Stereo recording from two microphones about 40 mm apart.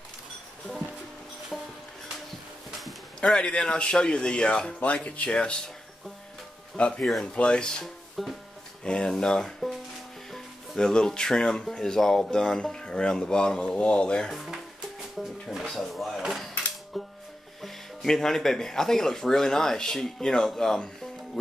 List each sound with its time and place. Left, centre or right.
1.5 s music: centre
3.3 s speech: left
6.8 s speech: centre
7.8 s speech: centre
8.8 s speech: left
10.8 s speech: centre
13.7 s speech: left
14.3 s speech: centre
15.7 s speech: centre
16.3 s music: centre
17.6 s speech: centre